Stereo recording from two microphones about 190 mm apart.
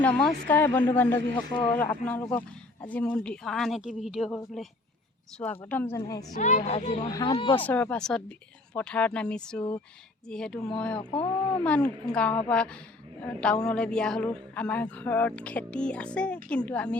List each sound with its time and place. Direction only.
0.0 s speech: 5° left (ahead or behind)
1.4 s speech: 20° left (ahead or behind)
1.6 s speech: 10° left (ahead or behind)
6.3 s speech: 40° left (ahead or behind)
7.0 s speech: 20° left (ahead or behind)
7.5 s speech: 10° left (ahead or behind)